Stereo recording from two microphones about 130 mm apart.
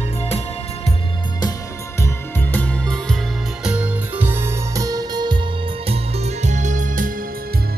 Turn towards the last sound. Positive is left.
turn(degrees=-85)